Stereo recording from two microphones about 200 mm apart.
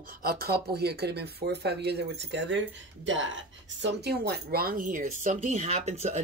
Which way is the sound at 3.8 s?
55° right (ahead or behind).